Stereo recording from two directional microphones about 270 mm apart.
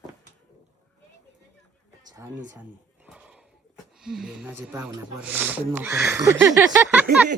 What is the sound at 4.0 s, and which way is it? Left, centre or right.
Speech, centre.